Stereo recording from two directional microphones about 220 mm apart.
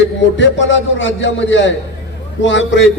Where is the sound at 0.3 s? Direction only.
55° left (ahead or behind).